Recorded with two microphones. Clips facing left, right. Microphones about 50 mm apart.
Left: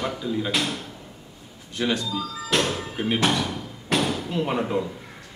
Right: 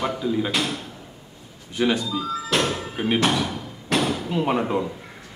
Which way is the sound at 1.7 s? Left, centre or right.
Centre.